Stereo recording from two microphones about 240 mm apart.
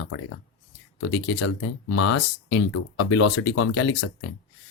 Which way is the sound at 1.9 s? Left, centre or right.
Left.